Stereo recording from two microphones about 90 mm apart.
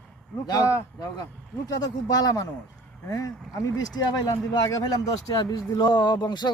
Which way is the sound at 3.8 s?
45° left (ahead or behind).